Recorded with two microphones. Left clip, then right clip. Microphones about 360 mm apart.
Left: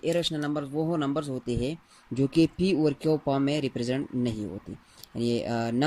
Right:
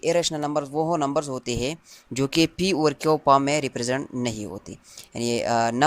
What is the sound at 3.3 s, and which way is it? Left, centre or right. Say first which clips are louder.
Speech: right 7 dB; centre.